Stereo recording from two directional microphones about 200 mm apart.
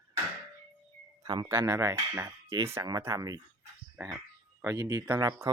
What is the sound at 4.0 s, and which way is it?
Frog, 15° right (ahead or behind).